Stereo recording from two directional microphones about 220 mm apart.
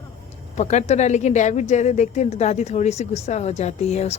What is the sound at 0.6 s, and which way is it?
A woman's voice, 30° left (ahead or behind).